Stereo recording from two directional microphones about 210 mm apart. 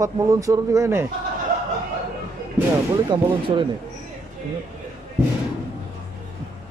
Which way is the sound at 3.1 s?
25° right (ahead or behind).